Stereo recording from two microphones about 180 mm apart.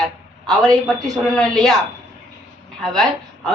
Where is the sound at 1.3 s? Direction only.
Centre (ahead or behind).